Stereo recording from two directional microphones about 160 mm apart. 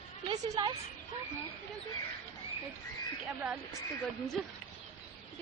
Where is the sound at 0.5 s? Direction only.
25° right (ahead or behind).